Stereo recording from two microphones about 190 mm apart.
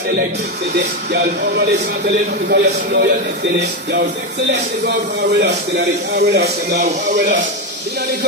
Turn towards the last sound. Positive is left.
turn(degrees=-60)  # may be behind; listen again after turning